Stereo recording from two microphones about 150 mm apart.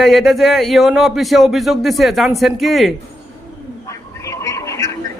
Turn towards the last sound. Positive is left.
turn(degrees=20)  # may be behind; listen again after turning